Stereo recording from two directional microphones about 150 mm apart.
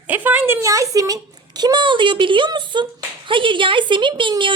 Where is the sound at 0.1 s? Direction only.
10° right (ahead or behind).